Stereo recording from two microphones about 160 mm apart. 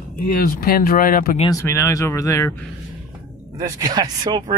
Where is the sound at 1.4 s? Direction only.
20° left (ahead or behind).